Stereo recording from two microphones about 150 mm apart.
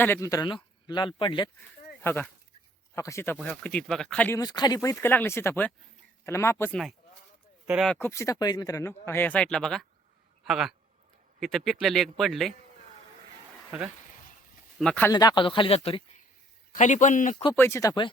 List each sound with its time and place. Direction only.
0.0 s speech: 15° left (ahead or behind)
2.0 s speech: 10° left (ahead or behind)
3.3 s speech: 5° left (ahead or behind)
4.4 s speech: 25° left (ahead or behind)
7.9 s a man's voice: 15° left (ahead or behind)
13.7 s speech: 10° right (ahead or behind)
14.0 s a sound: 60° left (ahead or behind)
14.8 s speech: 10° left (ahead or behind)
15.1 s speech: 25° left (ahead or behind)
16.7 s a man's voice: 55° left (ahead or behind)
17.5 s speech: 15° left (ahead or behind)